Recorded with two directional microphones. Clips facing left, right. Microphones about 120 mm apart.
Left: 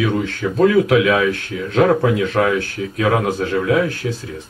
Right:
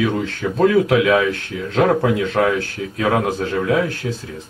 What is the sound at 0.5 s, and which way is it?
Speech, 25° right (ahead or behind).